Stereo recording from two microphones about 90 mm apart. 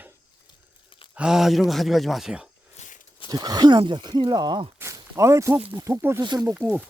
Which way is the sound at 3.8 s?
60° right (ahead or behind).